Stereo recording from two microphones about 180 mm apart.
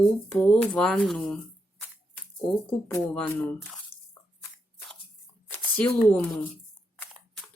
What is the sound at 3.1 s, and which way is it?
Speech, 10° left (ahead or behind).